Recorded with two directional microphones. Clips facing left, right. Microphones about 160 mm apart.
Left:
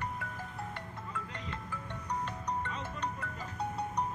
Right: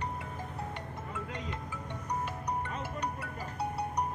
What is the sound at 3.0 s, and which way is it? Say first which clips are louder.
Music: right 1 dB; 10° right (ahead or behind).